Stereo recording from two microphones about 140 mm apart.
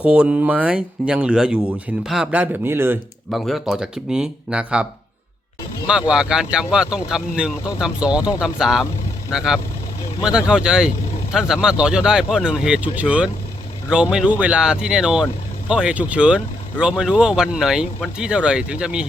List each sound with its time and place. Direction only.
0.0 s speech: 10° right (ahead or behind)
3.2 s speech: centre (ahead or behind)
6.1 s speech: 5° right (ahead or behind)